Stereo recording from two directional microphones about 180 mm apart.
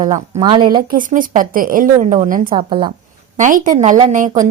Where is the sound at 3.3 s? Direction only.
45° right (ahead or behind).